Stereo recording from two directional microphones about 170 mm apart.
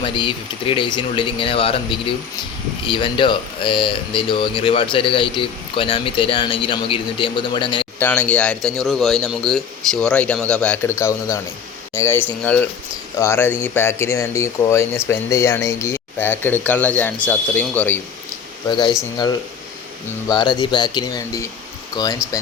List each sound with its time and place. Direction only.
0.0 s speech: 30° left (ahead or behind)
7.9 s a man's voice: 10° left (ahead or behind)
11.9 s speech: 15° left (ahead or behind)
19.1 s speech: 25° left (ahead or behind)